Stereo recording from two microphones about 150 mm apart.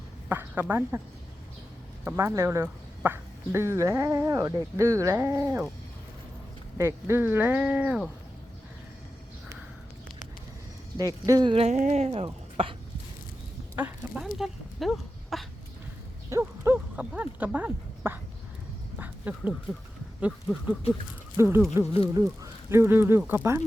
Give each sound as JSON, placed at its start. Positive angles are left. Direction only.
{"t": 0.3, "sound": "a woman's voice", "side_deg": -15}
{"t": 2.0, "sound": "speech", "side_deg": -20}
{"t": 6.7, "sound": "speech", "side_deg": -15}
{"t": 10.9, "sound": "speech", "side_deg": -25}
{"t": 11.5, "sound": "speech", "side_deg": -45}
{"t": 13.7, "sound": "a sound", "side_deg": -10}
{"t": 16.3, "sound": "speech", "side_deg": -15}
{"t": 18.9, "sound": "duck", "side_deg": -10}
{"t": 20.2, "sound": "speech", "side_deg": -10}
{"t": 22.7, "sound": "speech", "side_deg": -15}